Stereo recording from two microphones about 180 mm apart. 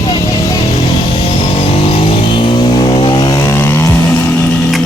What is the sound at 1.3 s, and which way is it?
Music, 30° left (ahead or behind).